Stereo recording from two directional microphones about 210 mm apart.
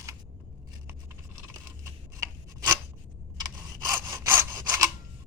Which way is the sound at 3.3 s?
20° right (ahead or behind).